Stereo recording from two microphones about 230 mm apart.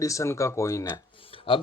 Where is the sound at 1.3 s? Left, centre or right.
Left.